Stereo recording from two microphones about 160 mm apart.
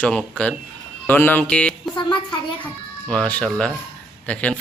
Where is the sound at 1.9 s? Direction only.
30° left (ahead or behind).